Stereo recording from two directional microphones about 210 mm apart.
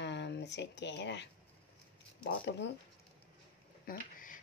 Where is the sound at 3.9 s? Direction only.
40° left (ahead or behind).